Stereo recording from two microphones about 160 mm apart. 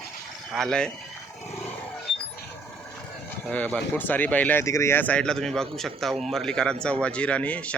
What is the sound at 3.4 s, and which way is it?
Speech, 10° left (ahead or behind).